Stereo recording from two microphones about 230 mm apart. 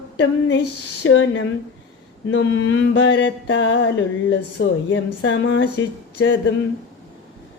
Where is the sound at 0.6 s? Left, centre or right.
Left.